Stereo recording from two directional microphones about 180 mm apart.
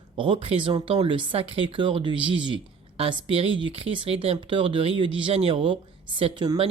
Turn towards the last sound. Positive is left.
turn(degrees=-30)  # may be behind; listen again after turning